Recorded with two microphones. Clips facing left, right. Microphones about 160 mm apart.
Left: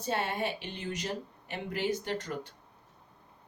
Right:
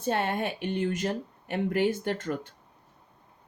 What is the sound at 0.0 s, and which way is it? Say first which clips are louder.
Speech: right 4 dB; 55° right (ahead or behind).